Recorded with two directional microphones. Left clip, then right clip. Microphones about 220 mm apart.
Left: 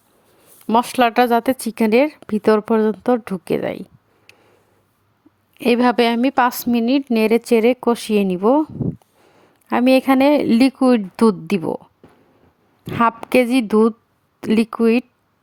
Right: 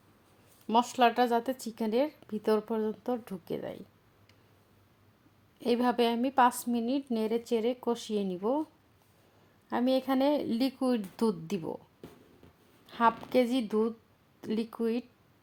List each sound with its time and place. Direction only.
0.7 s speech: 35° left (ahead or behind)
4.3 s a sound: 40° left (ahead or behind)
5.5 s speech: 35° left (ahead or behind)
9.6 s speech: 40° left (ahead or behind)
12.8 s speech: 40° left (ahead or behind)